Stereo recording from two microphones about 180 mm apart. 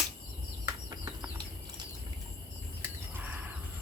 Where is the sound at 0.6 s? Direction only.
20° right (ahead or behind).